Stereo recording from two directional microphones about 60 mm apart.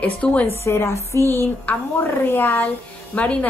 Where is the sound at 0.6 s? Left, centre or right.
Left.